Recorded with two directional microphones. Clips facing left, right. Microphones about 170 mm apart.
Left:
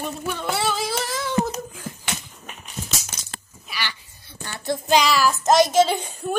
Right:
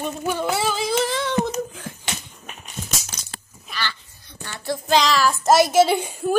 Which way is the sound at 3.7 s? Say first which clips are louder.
Right 2 dB; 10° left (ahead or behind).